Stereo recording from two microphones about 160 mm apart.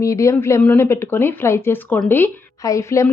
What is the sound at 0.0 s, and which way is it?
Speech, 20° left (ahead or behind).